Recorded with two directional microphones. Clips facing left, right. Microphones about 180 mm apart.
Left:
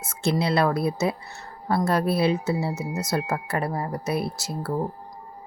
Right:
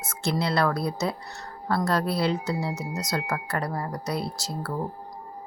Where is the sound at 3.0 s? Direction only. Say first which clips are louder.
Left 3 dB; 25° left (ahead or behind).